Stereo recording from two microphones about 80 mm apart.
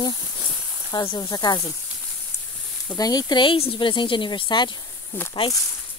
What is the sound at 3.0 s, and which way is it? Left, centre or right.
Speech, left.